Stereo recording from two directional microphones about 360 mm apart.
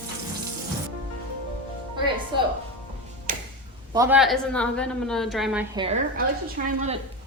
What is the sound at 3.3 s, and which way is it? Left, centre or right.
Tick-tock, right.